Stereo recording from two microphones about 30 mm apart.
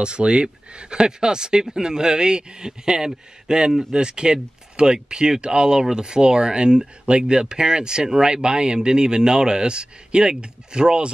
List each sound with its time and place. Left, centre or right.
0.0 s speech: right